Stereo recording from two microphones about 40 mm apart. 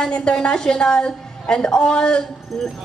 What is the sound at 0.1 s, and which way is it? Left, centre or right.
A woman's voice, left.